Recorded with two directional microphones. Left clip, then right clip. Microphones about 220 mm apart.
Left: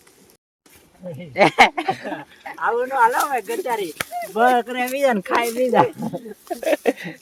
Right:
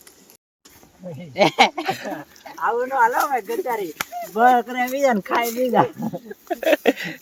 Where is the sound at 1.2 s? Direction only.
20° left (ahead or behind).